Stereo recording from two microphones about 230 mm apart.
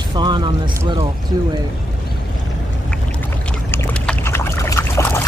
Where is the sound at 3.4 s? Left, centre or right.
Centre.